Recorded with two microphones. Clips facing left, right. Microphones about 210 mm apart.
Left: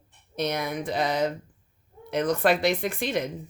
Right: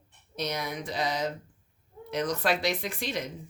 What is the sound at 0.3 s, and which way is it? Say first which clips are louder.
Speech: left 5 dB; 55° left (ahead or behind).